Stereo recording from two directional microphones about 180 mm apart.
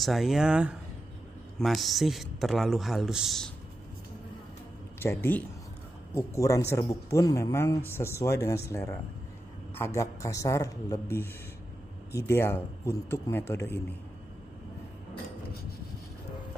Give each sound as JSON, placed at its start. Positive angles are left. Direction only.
{"t": 0.0, "sound": "a man's voice", "side_deg": 0}
{"t": 5.0, "sound": "speech", "side_deg": 10}